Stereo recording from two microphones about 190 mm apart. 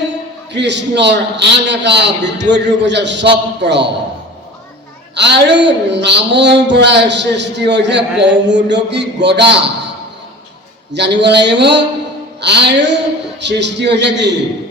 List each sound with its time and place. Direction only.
0.5 s a man's voice: 65° right (ahead or behind)
5.1 s a man's voice: 65° right (ahead or behind)
10.9 s a man's voice: 65° right (ahead or behind)